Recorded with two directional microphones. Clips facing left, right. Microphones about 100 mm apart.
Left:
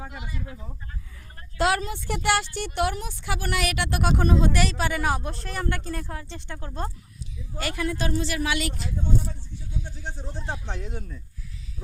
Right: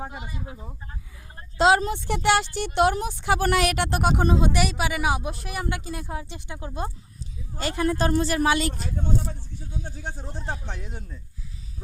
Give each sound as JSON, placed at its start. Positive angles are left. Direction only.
{"t": 0.1, "sound": "speech", "side_deg": -20}
{"t": 1.4, "sound": "a sound", "side_deg": -25}
{"t": 1.9, "sound": "speech", "side_deg": -25}
{"t": 7.6, "sound": "speech", "side_deg": -30}
{"t": 8.8, "sound": "speech", "side_deg": -50}
{"t": 9.8, "sound": "a sound", "side_deg": -45}